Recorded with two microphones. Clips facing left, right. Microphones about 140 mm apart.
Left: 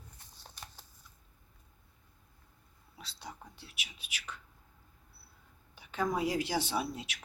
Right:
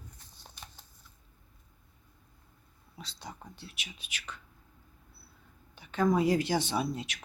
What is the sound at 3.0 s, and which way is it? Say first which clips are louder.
Speech: right 2 dB; 5° left (ahead or behind).